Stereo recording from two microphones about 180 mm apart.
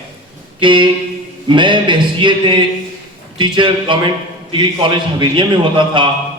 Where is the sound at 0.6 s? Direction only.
25° right (ahead or behind).